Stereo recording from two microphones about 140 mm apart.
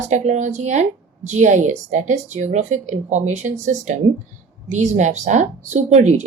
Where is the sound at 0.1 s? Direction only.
60° right (ahead or behind).